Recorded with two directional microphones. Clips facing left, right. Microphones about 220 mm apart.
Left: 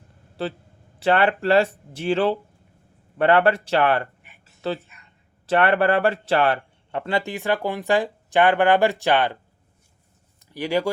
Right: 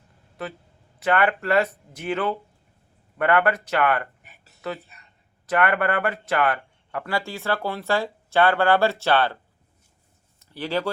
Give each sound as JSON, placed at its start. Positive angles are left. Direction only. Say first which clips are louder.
{"t": 0.4, "sound": "speech", "louder": "left 5 dB", "side_deg": 30}
{"t": 10.4, "sound": "speech", "louder": "left 3 dB", "side_deg": 15}